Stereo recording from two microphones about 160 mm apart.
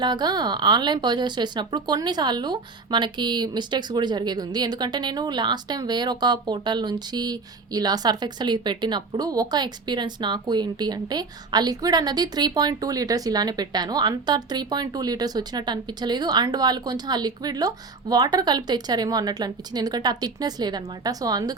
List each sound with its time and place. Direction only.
0.0 s a woman's voice: 25° right (ahead or behind)